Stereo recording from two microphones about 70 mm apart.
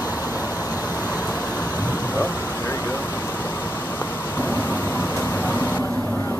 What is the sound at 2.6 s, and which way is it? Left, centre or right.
Vehicle, left.